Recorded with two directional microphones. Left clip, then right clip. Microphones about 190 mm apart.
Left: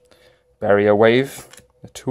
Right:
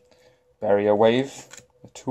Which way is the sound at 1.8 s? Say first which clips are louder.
Left 5 dB; 35° left (ahead or behind).